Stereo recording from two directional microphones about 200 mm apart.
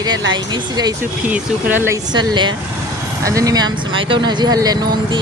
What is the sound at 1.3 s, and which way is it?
Speech, 5° right (ahead or behind).